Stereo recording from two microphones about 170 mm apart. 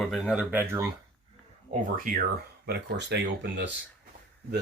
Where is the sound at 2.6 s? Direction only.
75° right (ahead or behind).